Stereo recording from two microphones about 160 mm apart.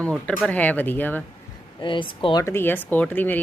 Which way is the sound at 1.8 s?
30° left (ahead or behind).